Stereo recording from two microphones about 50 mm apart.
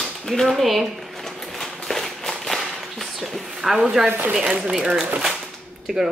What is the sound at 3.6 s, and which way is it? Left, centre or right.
Speech, centre.